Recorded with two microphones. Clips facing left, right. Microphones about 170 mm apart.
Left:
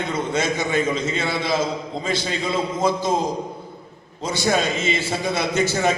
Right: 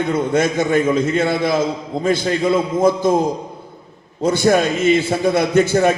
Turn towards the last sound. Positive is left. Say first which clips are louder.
# right 6 dB
turn(degrees=-55)  # may be behind; listen again after turning